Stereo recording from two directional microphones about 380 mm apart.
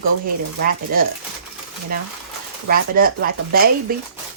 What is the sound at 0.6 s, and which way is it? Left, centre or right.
Speech, right.